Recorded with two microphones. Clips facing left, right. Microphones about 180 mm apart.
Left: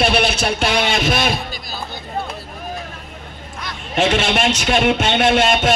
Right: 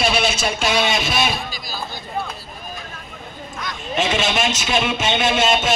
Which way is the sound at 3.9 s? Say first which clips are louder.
Left 3 dB; 60° left (ahead or behind).